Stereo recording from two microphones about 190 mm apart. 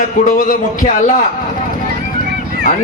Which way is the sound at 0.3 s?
45° left (ahead or behind).